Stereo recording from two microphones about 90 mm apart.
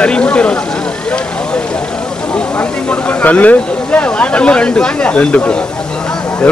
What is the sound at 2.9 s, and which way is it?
Speech, 15° left (ahead or behind).